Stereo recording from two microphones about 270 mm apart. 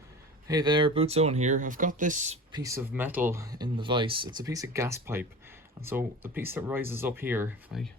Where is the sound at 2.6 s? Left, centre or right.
Centre.